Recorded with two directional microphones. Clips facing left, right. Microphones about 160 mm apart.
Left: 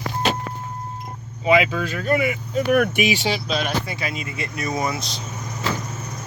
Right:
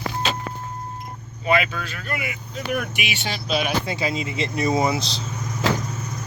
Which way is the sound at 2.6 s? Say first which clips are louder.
Left 8 dB; 60° left (ahead or behind).